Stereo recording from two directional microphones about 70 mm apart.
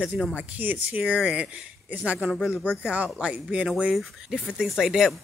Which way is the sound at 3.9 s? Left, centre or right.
Centre.